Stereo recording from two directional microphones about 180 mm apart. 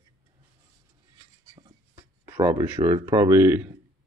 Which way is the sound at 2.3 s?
15° right (ahead or behind).